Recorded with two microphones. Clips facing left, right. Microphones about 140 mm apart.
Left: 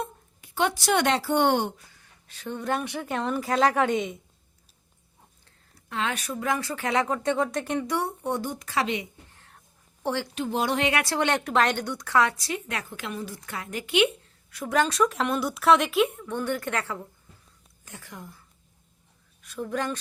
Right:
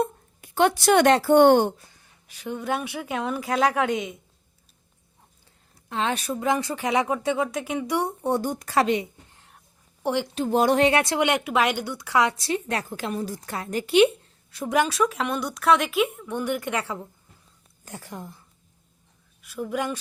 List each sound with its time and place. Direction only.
0.0 s speech: 50° right (ahead or behind)
2.2 s speech: 10° right (ahead or behind)
5.7 s speech: 25° right (ahead or behind)
8.2 s speech: 40° right (ahead or behind)
9.3 s whispering: 20° right (ahead or behind)
10.0 s a woman's voice: 15° right (ahead or behind)
10.3 s a woman's voice: 40° right (ahead or behind)
10.9 s speech: 20° right (ahead or behind)
12.4 s a woman's voice: 30° right (ahead or behind)
14.8 s speech: centre (ahead or behind)
17.8 s a woman's voice: 35° right (ahead or behind)
19.4 s speech: 10° right (ahead or behind)